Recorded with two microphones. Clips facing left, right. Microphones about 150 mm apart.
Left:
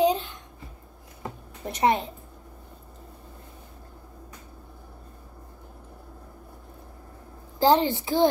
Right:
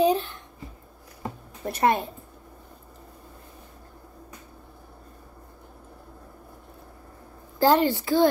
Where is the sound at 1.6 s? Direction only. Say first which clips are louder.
Even; 20° left (ahead or behind).